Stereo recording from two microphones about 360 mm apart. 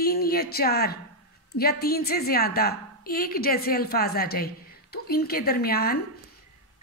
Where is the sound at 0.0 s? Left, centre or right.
Left.